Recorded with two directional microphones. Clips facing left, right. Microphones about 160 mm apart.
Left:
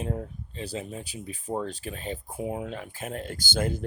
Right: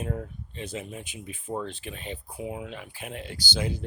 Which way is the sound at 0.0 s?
30° left (ahead or behind).